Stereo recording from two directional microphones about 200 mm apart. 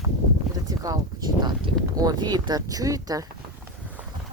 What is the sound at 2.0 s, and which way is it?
Speech, 20° right (ahead or behind).